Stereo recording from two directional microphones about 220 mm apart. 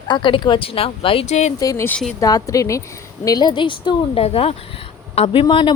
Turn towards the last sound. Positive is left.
turn(degrees=20)  # may be behind; listen again after turning